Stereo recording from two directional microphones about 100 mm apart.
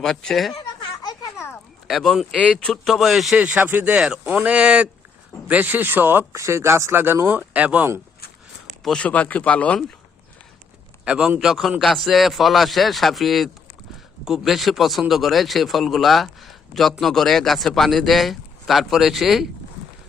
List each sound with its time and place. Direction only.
0.0 s a man's voice: 5° left (ahead or behind)
1.9 s a man's voice: centre (ahead or behind)
2.3 s speech: 15° left (ahead or behind)
2.9 s a man's voice: centre (ahead or behind)
8.8 s speech: 10° left (ahead or behind)
11.0 s a man's voice: 10° right (ahead or behind)